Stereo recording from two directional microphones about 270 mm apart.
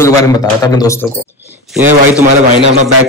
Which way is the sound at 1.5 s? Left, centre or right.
Centre.